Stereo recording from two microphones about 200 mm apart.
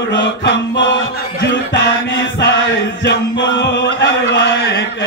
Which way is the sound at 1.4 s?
60° left (ahead or behind).